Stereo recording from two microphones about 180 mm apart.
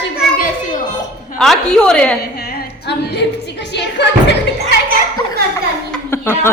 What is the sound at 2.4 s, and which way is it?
Music, 65° left (ahead or behind).